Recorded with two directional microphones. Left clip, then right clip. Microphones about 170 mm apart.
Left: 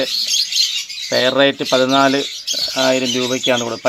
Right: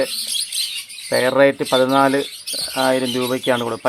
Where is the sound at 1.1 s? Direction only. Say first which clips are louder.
Even; centre (ahead or behind).